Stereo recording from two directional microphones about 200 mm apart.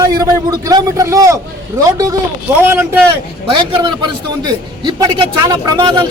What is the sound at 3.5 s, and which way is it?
A man's voice, 25° right (ahead or behind).